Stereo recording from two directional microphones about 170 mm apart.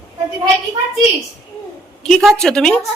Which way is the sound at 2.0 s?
5° left (ahead or behind).